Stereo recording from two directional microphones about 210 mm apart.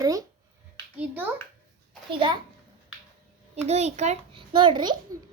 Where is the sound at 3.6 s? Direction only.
30° right (ahead or behind).